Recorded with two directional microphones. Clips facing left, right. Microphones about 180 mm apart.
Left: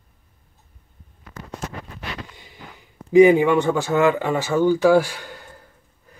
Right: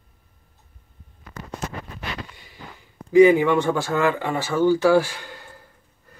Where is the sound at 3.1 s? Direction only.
20° left (ahead or behind).